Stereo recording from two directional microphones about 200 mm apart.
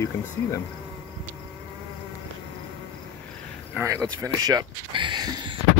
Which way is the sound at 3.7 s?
15° right (ahead or behind).